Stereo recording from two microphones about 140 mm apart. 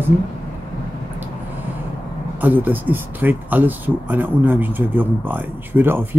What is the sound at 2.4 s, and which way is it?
Speech, 10° right (ahead or behind).